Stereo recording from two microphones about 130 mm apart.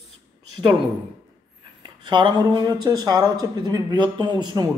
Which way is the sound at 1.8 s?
35° right (ahead or behind).